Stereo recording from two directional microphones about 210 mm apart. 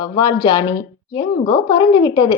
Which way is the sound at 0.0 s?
20° left (ahead or behind).